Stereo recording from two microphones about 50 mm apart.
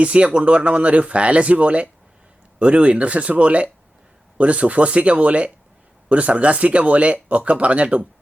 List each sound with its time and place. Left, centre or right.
0.0 s speech: right